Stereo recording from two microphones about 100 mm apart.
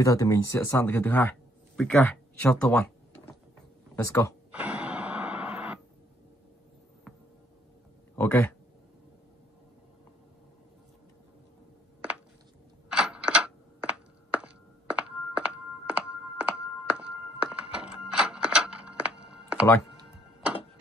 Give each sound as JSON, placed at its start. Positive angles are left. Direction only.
{"t": 0.0, "sound": "speech", "side_deg": 35}
{"t": 4.0, "sound": "speech", "side_deg": 30}
{"t": 4.5, "sound": "a sound", "side_deg": -15}
{"t": 8.2, "sound": "speech", "side_deg": 20}
{"t": 12.9, "sound": "a sound", "side_deg": -10}
{"t": 16.3, "sound": "thunk", "side_deg": -15}